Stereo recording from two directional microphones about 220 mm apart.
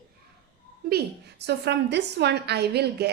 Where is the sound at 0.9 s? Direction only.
50° right (ahead or behind).